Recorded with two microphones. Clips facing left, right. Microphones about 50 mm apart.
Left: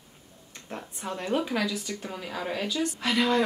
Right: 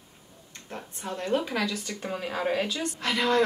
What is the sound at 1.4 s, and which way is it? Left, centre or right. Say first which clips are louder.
Speech: left 1 dB; centre.